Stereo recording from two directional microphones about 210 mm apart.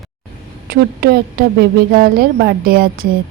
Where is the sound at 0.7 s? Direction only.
45° right (ahead or behind).